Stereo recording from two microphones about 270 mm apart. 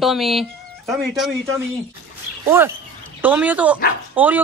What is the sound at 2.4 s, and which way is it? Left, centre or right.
Speech, centre.